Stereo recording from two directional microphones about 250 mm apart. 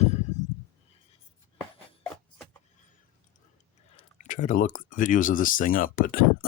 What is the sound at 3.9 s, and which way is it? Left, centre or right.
Speech, left.